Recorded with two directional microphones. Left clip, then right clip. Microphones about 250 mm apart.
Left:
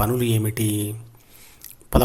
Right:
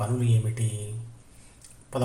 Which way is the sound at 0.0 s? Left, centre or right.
Left.